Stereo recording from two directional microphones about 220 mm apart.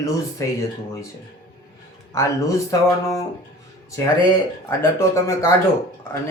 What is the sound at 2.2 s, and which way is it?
Speech, 15° left (ahead or behind).